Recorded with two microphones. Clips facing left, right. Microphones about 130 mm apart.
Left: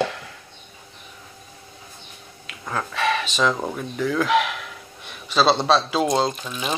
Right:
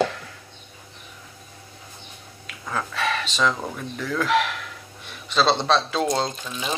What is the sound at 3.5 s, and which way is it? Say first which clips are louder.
Speech: left 4 dB; 15° left (ahead or behind).